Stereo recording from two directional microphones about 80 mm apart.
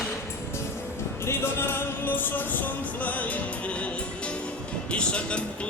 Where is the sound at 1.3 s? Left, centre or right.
Left.